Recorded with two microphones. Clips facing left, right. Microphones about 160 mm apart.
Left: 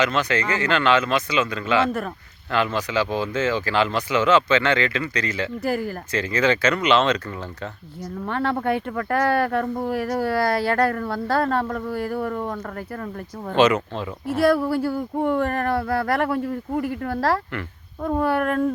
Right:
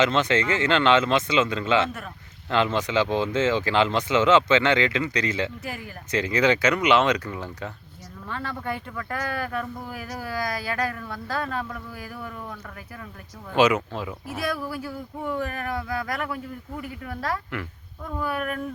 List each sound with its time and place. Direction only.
0.0 s speech: 25° right (ahead or behind)
5.6 s speech: 40° left (ahead or behind)
6.1 s speech: 20° right (ahead or behind)
8.3 s speech: 60° left (ahead or behind)
13.6 s speech: 10° right (ahead or behind)
14.4 s speech: 65° left (ahead or behind)